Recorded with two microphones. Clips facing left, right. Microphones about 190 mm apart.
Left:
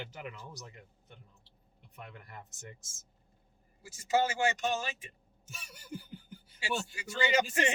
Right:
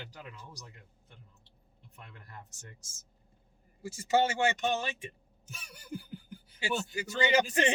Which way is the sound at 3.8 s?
25° right (ahead or behind).